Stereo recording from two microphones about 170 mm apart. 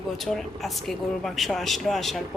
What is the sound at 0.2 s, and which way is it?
A woman's voice, centre (ahead or behind).